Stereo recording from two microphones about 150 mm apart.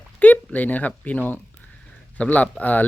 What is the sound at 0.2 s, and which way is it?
Speech, 10° left (ahead or behind).